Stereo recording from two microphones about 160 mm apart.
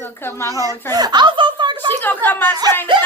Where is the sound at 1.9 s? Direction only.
10° left (ahead or behind).